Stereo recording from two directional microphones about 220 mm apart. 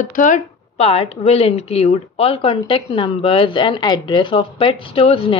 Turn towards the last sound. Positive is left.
turn(degrees=25)  # may be behind; listen again after turning